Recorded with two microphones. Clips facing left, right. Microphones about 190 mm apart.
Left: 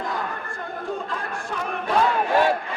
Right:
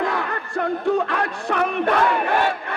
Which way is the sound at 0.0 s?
75° right (ahead or behind).